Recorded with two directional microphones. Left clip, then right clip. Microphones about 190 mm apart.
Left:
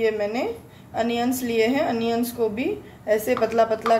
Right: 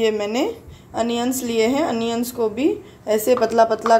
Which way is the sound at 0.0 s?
40° right (ahead or behind).